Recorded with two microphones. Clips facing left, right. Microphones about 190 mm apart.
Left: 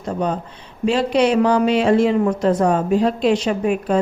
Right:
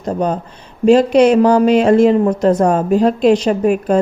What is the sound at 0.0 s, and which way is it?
A woman's voice, 40° right (ahead or behind).